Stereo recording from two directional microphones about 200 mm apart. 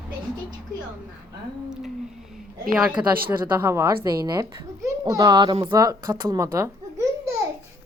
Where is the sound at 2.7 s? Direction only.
5° right (ahead or behind).